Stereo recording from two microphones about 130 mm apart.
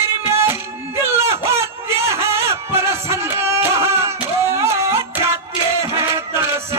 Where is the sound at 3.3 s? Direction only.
20° right (ahead or behind).